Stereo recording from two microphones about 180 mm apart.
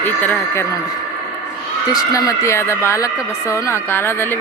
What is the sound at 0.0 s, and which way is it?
Speech, 10° left (ahead or behind).